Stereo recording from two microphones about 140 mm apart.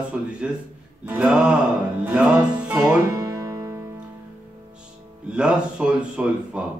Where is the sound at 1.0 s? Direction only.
10° right (ahead or behind).